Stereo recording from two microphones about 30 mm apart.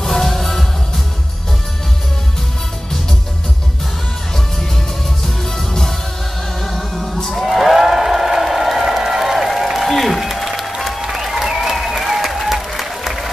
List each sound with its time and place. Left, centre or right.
0.0 s music: centre
5.7 s music: centre
6.6 s music: centre
7.2 s a sound: centre
11.0 s applause: centre